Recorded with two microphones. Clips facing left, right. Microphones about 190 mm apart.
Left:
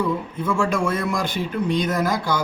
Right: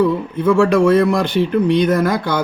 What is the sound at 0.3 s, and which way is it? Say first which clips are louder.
Speech: right 11 dB; 65° right (ahead or behind).